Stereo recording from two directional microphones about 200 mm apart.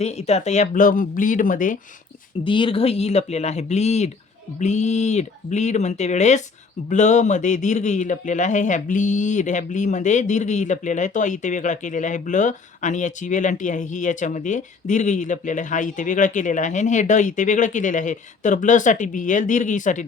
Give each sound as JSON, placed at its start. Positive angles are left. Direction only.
{"t": 0.0, "sound": "a man's voice", "side_deg": 35}
{"t": 2.4, "sound": "a man's voice", "side_deg": 25}